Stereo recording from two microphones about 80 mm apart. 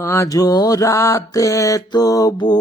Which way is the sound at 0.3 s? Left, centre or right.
Left.